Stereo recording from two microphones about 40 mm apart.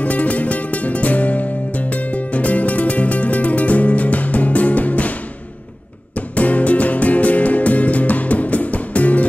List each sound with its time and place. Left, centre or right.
0.0 s music: left
6.1 s music: left